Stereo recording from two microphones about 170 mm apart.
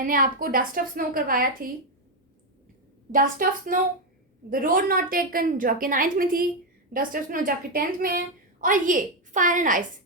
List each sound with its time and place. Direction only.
0.0 s a woman's voice: 55° right (ahead or behind)
3.1 s a woman's voice: 55° right (ahead or behind)